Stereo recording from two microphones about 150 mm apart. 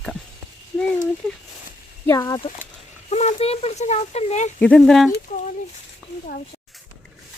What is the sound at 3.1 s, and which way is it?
Speech, 50° left (ahead or behind).